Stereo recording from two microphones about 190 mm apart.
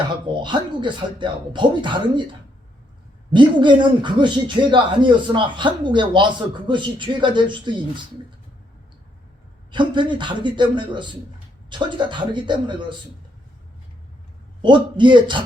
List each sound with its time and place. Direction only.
0.3 s speech: 25° right (ahead or behind)
3.3 s speech: 25° right (ahead or behind)
9.7 s speech: 25° right (ahead or behind)
14.6 s speech: 25° right (ahead or behind)